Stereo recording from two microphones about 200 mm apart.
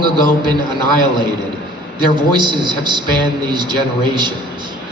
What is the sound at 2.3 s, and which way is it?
A man's voice, 25° right (ahead or behind).